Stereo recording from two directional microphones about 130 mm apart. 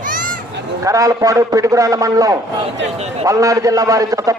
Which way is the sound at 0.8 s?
25° right (ahead or behind).